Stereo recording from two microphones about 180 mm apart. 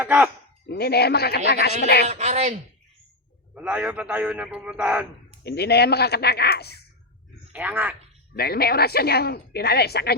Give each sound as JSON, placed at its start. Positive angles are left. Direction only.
{"t": 0.0, "sound": "a man's voice", "side_deg": -10}
{"t": 0.7, "sound": "a woman's voice", "side_deg": 60}
{"t": 2.0, "sound": "speech", "side_deg": -40}
{"t": 3.5, "sound": "a man's voice", "side_deg": -5}
{"t": 5.4, "sound": "a woman's voice", "side_deg": 65}
{"t": 7.5, "sound": "a man's voice", "side_deg": -10}
{"t": 8.4, "sound": "a woman's voice", "side_deg": 60}